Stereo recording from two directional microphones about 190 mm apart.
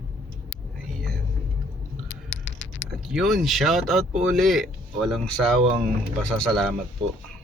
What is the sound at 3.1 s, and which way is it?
Speech, centre (ahead or behind).